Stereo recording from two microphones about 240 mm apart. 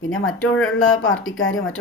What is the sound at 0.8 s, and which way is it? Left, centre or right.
Speech, left.